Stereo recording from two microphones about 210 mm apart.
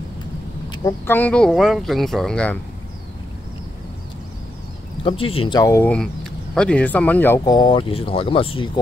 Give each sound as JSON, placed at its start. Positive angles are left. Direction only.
{"t": 0.7, "sound": "speech", "side_deg": 15}
{"t": 5.0, "sound": "speech", "side_deg": 25}